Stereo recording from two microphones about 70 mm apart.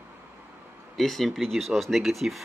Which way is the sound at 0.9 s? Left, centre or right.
Centre.